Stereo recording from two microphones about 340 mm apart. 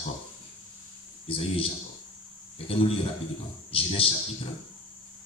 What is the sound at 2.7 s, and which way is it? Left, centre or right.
A man's voice, centre.